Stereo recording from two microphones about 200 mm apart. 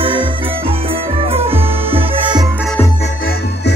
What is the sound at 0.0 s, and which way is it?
Music, 25° right (ahead or behind).